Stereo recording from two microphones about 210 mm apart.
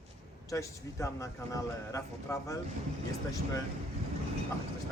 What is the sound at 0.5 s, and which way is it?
Speech, 15° left (ahead or behind).